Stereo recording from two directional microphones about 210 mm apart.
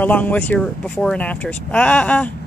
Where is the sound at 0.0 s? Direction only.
10° left (ahead or behind).